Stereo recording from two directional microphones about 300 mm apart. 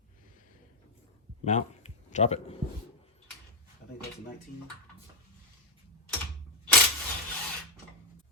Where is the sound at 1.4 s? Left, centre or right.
Left.